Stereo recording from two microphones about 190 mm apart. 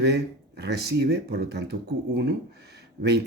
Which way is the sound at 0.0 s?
60° right (ahead or behind).